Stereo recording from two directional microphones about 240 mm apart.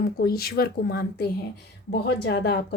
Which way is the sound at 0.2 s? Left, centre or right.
Left.